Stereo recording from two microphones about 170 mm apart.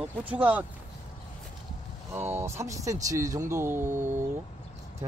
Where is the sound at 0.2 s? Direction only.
10° right (ahead or behind).